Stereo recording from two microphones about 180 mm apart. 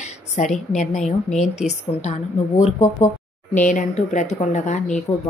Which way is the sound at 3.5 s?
45° left (ahead or behind).